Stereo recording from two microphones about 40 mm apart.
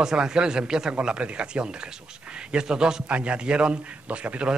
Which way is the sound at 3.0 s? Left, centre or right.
Right.